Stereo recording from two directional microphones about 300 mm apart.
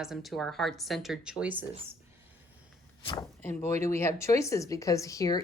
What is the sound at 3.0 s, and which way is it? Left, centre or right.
Speech, centre.